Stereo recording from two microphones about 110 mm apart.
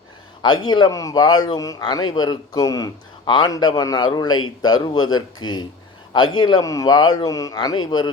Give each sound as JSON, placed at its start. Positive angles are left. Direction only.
{"t": 0.4, "sound": "a man's voice", "side_deg": 45}